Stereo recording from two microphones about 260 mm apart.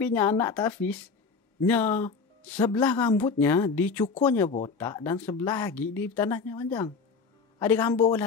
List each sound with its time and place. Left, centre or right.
0.0 s speech: centre
4.5 s speech: left
4.7 s a man's voice: centre